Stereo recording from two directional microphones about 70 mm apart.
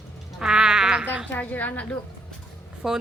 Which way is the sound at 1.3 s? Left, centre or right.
Left.